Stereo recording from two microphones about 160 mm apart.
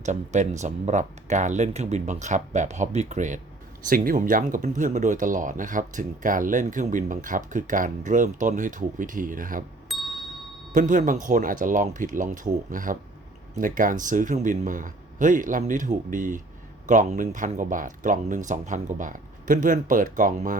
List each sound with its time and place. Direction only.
0.0 s speech: 50° right (ahead or behind)
3.8 s speech: 60° right (ahead or behind)
9.9 s ding: centre (ahead or behind)
10.7 s speech: 55° right (ahead or behind)